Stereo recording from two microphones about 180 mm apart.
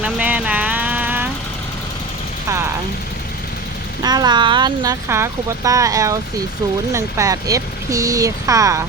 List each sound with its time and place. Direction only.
0.0 s vehicle: 10° right (ahead or behind)
2.5 s vehicle: 15° right (ahead or behind)
4.0 s speech: 20° right (ahead or behind)